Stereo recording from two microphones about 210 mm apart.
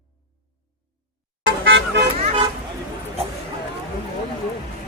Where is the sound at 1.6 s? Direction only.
60° right (ahead or behind).